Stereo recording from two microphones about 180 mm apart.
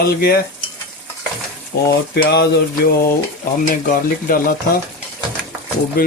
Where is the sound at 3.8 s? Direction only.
50° left (ahead or behind).